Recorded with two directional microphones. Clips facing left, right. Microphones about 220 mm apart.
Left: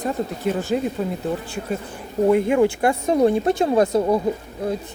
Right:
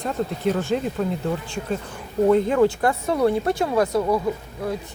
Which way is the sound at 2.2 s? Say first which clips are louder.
Left 1 dB; 10° left (ahead or behind).